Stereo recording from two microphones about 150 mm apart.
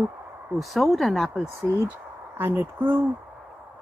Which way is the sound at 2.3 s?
15° right (ahead or behind).